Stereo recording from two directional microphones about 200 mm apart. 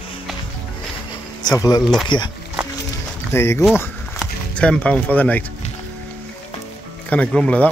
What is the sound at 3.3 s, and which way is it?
Speech, 10° left (ahead or behind).